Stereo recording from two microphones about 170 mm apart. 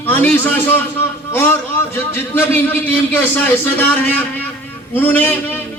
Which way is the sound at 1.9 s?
10° left (ahead or behind).